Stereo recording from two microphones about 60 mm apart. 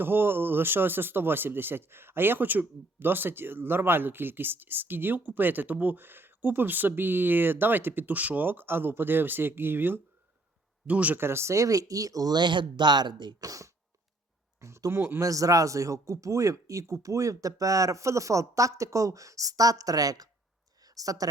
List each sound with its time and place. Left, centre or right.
0.0 s speech: right
10.8 s speech: right
11.2 s speech: right
13.4 s speech: right
14.6 s a man's voice: right
14.9 s speech: right
15.2 s a man's voice: right
20.8 s a sound: right